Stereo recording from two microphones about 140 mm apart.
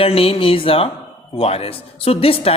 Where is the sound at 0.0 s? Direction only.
45° left (ahead or behind).